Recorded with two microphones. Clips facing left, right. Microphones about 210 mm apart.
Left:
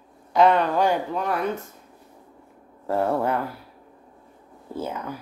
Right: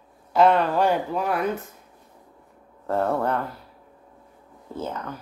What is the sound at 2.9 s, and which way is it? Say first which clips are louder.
Speech: left 1 dB; 5° left (ahead or behind).